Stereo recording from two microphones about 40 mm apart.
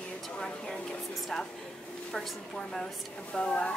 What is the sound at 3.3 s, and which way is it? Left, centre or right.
Speech, left.